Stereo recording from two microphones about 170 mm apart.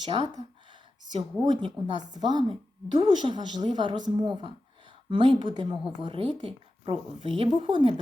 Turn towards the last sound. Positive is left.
turn(degrees=-35)  # may be behind; listen again after turning